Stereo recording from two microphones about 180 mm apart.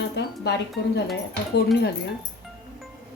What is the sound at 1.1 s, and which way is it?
Speech, 65° left (ahead or behind).